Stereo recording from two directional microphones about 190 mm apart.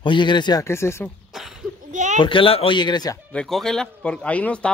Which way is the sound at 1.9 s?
40° right (ahead or behind).